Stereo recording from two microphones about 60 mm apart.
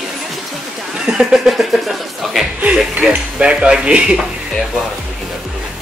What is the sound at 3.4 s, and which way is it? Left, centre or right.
Speech, centre.